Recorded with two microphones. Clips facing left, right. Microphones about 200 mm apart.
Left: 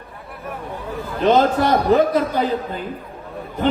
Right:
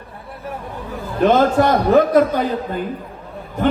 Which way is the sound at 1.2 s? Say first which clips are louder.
Right 2 dB; 50° right (ahead or behind).